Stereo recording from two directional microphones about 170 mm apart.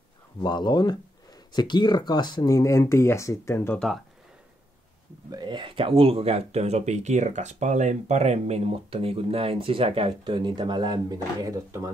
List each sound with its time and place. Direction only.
0.4 s speech: 25° left (ahead or behind); by 4.0 s 5° left (ahead or behind)
5.3 s speech: 25° right (ahead or behind)